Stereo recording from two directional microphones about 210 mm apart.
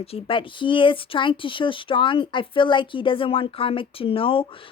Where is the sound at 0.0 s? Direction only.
30° left (ahead or behind).